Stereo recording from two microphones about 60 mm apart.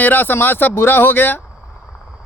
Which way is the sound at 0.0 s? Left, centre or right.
Left.